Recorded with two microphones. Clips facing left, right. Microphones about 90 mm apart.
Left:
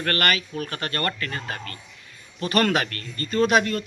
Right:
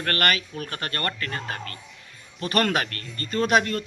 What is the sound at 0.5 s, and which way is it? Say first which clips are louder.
Speech: left 3 dB; 40° left (ahead or behind).